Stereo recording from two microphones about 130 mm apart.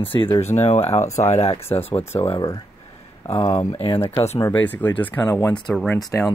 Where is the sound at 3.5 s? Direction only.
25° left (ahead or behind).